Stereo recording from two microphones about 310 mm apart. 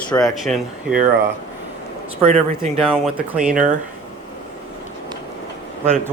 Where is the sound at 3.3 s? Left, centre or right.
Centre.